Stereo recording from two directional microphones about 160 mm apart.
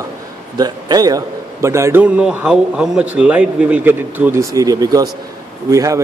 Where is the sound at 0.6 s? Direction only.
25° right (ahead or behind).